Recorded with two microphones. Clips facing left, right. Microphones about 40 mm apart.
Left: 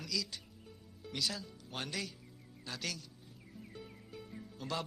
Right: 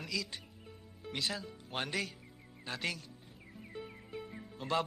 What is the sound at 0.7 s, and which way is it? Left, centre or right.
Music, centre.